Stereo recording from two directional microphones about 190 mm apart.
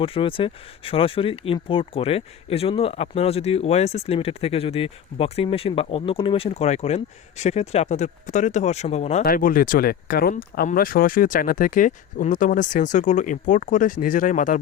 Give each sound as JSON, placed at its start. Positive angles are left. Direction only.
{"t": 0.0, "sound": "speech", "side_deg": 30}
{"t": 9.2, "sound": "speech", "side_deg": 50}